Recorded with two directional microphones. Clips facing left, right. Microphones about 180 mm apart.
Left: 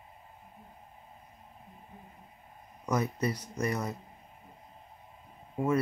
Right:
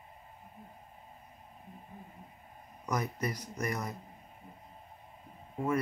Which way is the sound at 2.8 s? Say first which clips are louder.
Left 4 dB; 25° left (ahead or behind).